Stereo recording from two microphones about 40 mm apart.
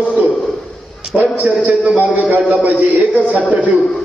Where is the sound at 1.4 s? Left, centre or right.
Right.